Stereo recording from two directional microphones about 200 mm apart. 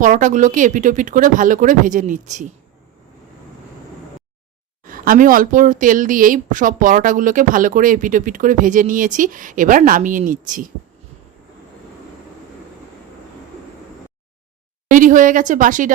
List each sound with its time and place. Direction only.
0.0 s a woman's voice: 40° right (ahead or behind)
4.9 s a woman's voice: 45° right (ahead or behind)
14.8 s a woman's voice: 40° right (ahead or behind)